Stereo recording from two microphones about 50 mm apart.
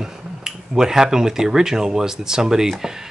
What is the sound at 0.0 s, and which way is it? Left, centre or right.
Speech, centre.